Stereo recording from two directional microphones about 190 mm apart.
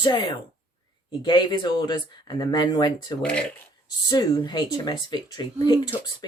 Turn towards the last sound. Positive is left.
turn(degrees=20)  # may be behind; listen again after turning